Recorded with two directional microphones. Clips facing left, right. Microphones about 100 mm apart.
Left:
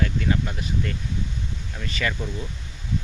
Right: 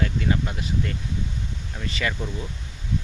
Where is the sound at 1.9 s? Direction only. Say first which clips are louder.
Even; 25° right (ahead or behind).